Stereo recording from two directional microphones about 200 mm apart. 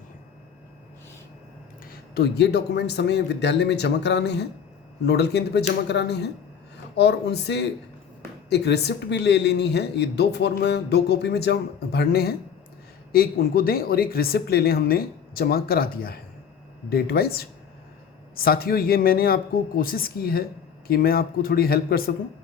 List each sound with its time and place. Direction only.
1.9 s speech: 50° left (ahead or behind)